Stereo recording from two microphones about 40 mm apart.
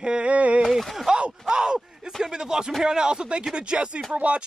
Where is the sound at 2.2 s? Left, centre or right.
Centre.